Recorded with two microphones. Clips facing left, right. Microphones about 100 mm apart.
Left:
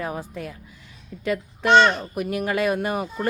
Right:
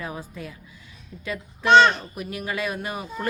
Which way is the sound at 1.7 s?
10° left (ahead or behind).